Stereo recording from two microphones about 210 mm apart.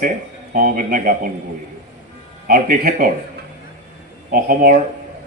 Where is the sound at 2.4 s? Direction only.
45° right (ahead or behind).